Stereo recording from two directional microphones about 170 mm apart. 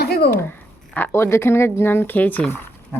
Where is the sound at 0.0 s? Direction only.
65° left (ahead or behind).